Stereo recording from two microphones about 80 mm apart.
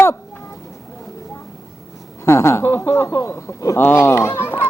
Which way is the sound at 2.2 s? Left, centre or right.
Left.